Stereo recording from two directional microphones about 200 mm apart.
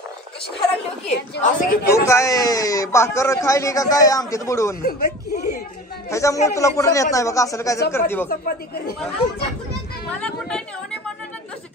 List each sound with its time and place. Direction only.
1.4 s speech: 45° left (ahead or behind)
2.0 s a man's voice: 15° left (ahead or behind)
4.8 s speech: 55° left (ahead or behind)
6.0 s a man's voice: 15° left (ahead or behind)
8.3 s speech: 50° left (ahead or behind)
10.2 s a sound: 5° left (ahead or behind)